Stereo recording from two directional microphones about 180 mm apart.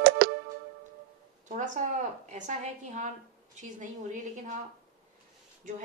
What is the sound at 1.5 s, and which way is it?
A woman's voice, 45° right (ahead or behind).